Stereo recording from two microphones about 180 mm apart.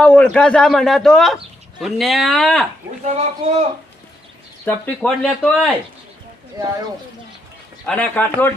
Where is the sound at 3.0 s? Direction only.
35° right (ahead or behind).